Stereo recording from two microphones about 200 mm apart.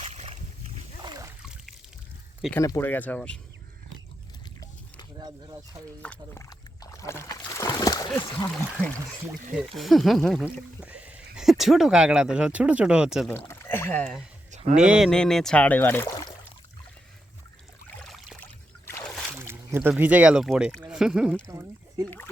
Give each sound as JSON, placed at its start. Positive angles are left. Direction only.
{"t": 0.0, "sound": "splash", "side_deg": -30}
{"t": 1.0, "sound": "splash", "side_deg": -20}
{"t": 2.6, "sound": "speech", "side_deg": 15}
{"t": 6.0, "sound": "a sound", "side_deg": 10}
{"t": 9.7, "sound": "speech", "side_deg": 0}
{"t": 13.3, "sound": "speech", "side_deg": 10}
{"t": 14.5, "sound": "a sound", "side_deg": -35}
{"t": 14.8, "sound": "speech", "side_deg": -5}
{"t": 17.8, "sound": "a sound", "side_deg": 0}
{"t": 19.4, "sound": "speech", "side_deg": -10}